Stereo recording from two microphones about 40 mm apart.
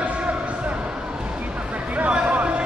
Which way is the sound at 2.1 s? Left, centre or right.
Right.